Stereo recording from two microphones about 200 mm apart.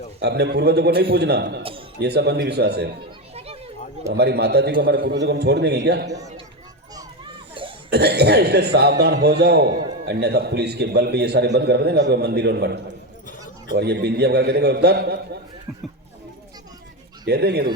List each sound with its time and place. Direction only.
0.2 s a man's voice: 55° right (ahead or behind)
3.3 s children playing: 30° right (ahead or behind)
4.1 s a man's voice: 55° right (ahead or behind)
7.9 s a man's voice: 55° right (ahead or behind)
17.2 s speech: 55° right (ahead or behind)